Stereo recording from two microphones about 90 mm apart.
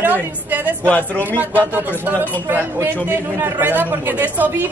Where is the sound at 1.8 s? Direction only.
20° right (ahead or behind).